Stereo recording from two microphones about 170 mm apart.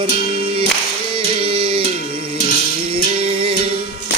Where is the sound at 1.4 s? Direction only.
35° right (ahead or behind).